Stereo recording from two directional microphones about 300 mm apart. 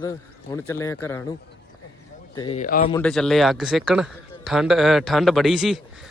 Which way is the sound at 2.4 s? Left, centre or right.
Left.